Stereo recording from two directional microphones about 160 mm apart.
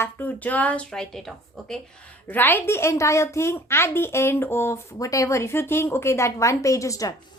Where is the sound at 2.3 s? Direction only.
15° left (ahead or behind).